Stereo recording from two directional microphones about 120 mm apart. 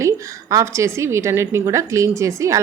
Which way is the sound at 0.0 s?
25° right (ahead or behind).